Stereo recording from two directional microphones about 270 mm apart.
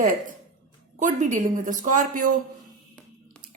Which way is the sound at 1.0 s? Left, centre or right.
Right.